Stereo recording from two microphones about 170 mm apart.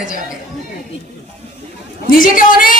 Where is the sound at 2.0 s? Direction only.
55° left (ahead or behind).